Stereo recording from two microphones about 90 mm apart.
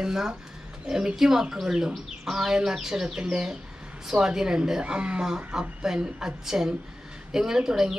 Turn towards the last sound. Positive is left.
turn(degrees=-5)  # may be behind; listen again after turning